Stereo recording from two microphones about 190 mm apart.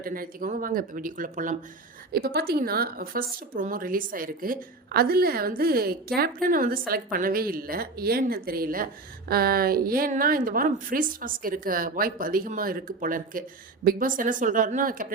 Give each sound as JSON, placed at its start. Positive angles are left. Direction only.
{"t": 0.0, "sound": "a woman's voice", "side_deg": -50}
{"t": 2.1, "sound": "a woman's voice", "side_deg": -55}